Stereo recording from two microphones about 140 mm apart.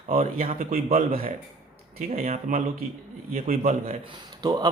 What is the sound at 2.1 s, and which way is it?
Speech, 50° right (ahead or behind).